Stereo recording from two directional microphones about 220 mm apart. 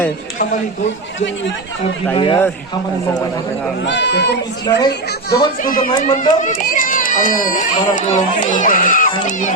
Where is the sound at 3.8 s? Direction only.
55° left (ahead or behind).